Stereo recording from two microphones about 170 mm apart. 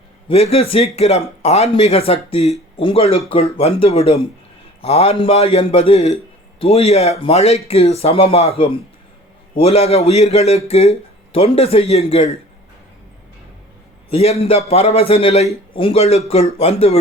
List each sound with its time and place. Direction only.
0.3 s speech: 35° left (ahead or behind)
14.1 s speech: 40° left (ahead or behind)